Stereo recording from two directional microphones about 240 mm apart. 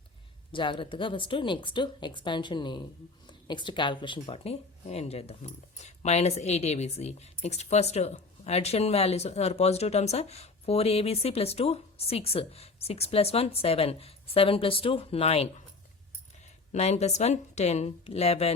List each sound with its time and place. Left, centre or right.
0.5 s speech: centre
16.7 s speech: left